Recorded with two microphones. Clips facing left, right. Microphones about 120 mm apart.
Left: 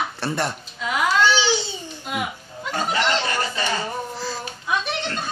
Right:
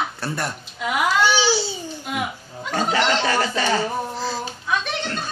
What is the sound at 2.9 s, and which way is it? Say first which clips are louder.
Speech: right 3 dB; 90° right.